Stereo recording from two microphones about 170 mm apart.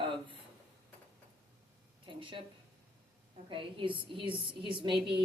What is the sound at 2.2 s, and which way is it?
Speech, 30° right (ahead or behind).